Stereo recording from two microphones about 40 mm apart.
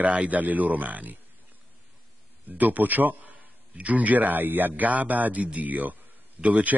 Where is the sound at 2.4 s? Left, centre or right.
Right.